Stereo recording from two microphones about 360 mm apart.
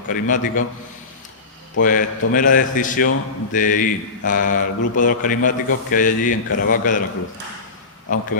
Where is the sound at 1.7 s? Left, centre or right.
Left.